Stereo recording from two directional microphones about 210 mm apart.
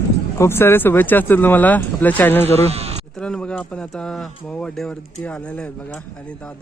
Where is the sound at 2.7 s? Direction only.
30° right (ahead or behind).